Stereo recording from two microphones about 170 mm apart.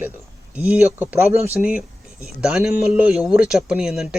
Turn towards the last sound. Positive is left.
turn(degrees=-5)  # may be behind; listen again after turning